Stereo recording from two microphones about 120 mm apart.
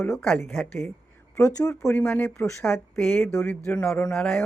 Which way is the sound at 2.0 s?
10° left (ahead or behind).